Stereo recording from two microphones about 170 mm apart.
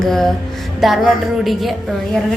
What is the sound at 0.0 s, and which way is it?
A woman's voice, centre (ahead or behind).